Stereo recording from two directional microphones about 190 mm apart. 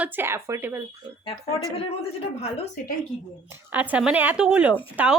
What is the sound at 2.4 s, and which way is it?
Speech, 35° left (ahead or behind).